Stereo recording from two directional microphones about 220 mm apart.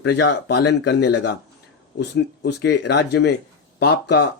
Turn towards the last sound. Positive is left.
turn(degrees=50)  # may be behind; listen again after turning